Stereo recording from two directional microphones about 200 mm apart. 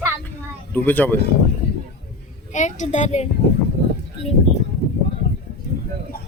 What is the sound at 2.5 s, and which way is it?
Speech, 35° left (ahead or behind).